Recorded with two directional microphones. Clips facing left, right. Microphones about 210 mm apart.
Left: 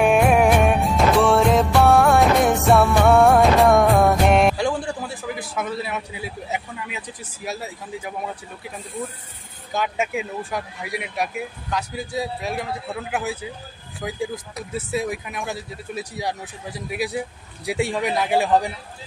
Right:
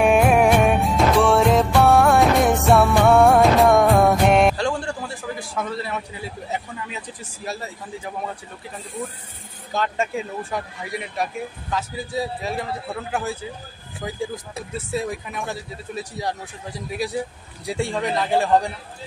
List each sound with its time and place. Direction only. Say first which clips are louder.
0.0 s music: even; centre (ahead or behind)
9.8 s a man's voice: even; 5° left (ahead or behind)